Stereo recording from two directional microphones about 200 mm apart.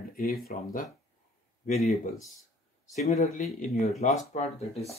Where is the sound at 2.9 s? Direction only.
30° left (ahead or behind).